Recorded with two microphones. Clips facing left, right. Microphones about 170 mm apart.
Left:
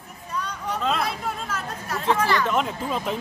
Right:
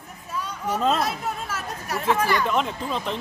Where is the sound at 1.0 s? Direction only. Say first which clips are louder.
Right 1 dB; 5° right (ahead or behind).